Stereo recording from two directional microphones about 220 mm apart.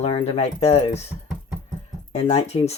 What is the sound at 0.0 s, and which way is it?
Speech, 25° left (ahead or behind).